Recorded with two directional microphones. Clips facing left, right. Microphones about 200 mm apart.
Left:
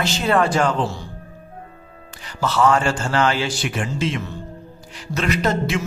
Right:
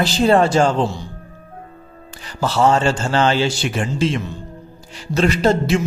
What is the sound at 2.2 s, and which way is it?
A man's voice, 30° right (ahead or behind).